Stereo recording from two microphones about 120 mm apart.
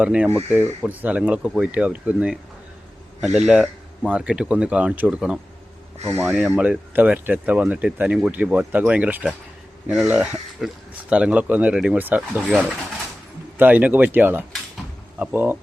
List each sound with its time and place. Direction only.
0.0 s speech: 10° right (ahead or behind)
6.1 s speech: 20° right (ahead or behind)
6.3 s speech: 5° right (ahead or behind)
13.6 s speech: 15° right (ahead or behind)